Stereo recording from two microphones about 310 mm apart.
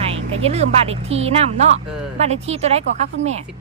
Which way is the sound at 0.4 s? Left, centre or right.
Centre.